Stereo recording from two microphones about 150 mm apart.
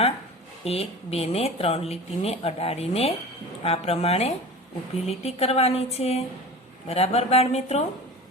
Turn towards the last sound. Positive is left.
turn(degrees=45)  # may be behind; listen again after turning